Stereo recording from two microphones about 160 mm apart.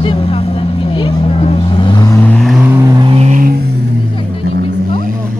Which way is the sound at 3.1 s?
45° right (ahead or behind).